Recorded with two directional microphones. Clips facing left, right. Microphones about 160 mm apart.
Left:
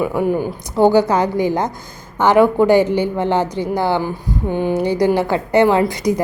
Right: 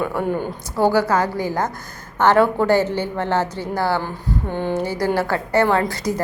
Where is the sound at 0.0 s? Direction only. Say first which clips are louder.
Left 4 dB; 10° left (ahead or behind).